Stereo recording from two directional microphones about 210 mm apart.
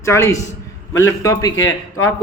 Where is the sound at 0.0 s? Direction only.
15° left (ahead or behind).